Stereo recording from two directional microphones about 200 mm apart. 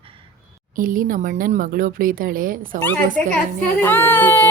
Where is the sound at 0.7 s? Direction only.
40° right (ahead or behind).